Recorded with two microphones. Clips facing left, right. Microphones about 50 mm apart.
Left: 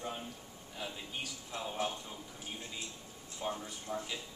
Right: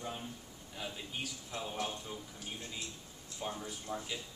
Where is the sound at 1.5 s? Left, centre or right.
Centre.